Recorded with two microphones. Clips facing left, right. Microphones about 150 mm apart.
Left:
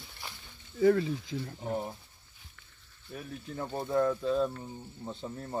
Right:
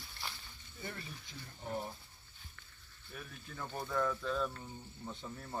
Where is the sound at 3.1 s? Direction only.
35° left (ahead or behind).